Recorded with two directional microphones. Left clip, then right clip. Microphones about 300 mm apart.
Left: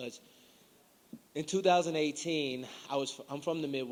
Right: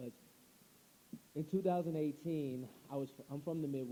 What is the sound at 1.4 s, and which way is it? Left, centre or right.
A man's voice, centre.